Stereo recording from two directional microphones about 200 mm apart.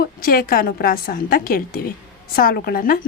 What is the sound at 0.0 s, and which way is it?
A woman's voice, 45° left (ahead or behind).